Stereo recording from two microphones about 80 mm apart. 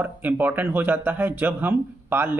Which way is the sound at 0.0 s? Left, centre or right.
Right.